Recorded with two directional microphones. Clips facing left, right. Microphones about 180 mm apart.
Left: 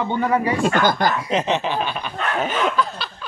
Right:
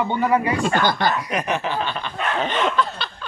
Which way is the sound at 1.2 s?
25° left (ahead or behind).